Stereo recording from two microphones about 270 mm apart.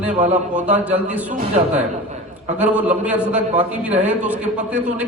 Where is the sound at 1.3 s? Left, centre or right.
Right.